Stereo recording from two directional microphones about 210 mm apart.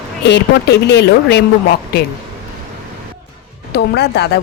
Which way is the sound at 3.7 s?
50° left (ahead or behind).